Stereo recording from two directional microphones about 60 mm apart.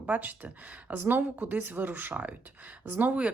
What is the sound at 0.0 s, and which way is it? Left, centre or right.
A woman's voice, right.